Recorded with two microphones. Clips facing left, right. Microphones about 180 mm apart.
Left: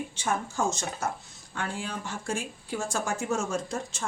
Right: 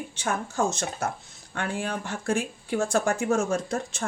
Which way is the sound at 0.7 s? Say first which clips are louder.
Right 1 dB; 65° right (ahead or behind).